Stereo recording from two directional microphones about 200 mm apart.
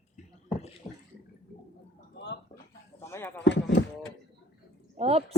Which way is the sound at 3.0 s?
15° left (ahead or behind).